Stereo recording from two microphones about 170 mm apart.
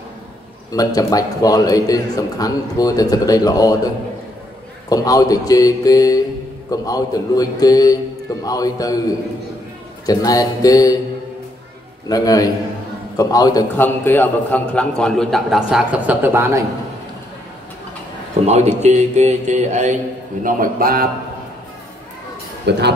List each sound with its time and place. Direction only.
0.7 s a man's voice: 20° left (ahead or behind)
4.8 s a man's voice: 20° left (ahead or behind)
10.0 s a man's voice: 20° left (ahead or behind)
12.1 s a man's voice: 20° left (ahead or behind); by 16.6 s 15° right (ahead or behind)
18.5 s speech: 40° right (ahead or behind)
20.4 s a man's voice: 55° right (ahead or behind)
22.7 s speech: 80° right